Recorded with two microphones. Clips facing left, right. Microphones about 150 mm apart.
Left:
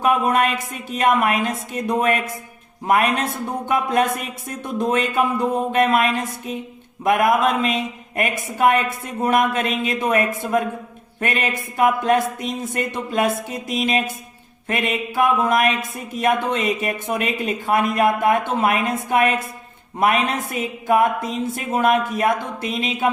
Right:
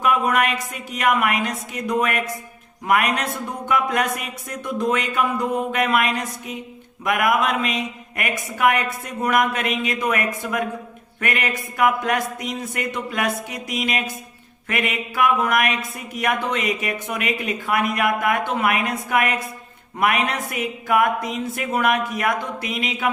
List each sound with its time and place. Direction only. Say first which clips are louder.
0.0 s speech: left 2 dB; 30° left (ahead or behind)